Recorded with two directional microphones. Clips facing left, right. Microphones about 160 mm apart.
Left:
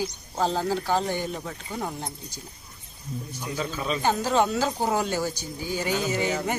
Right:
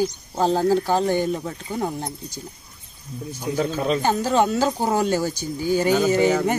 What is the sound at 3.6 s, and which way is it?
Speech, 60° right (ahead or behind).